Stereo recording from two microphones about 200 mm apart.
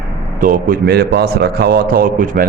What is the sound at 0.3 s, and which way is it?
A man's voice, 45° right (ahead or behind).